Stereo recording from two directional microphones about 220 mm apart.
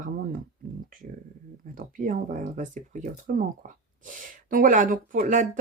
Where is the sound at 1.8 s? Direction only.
35° right (ahead or behind).